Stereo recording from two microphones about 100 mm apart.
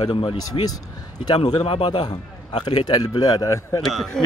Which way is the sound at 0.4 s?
40° left (ahead or behind).